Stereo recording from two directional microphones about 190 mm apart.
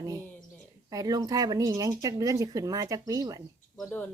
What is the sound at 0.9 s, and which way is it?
Speech, 20° right (ahead or behind).